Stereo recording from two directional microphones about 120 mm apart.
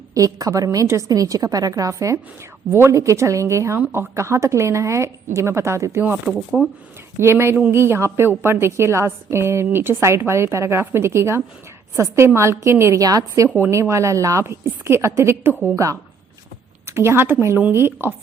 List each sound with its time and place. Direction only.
0.1 s a woman's voice: 30° right (ahead or behind)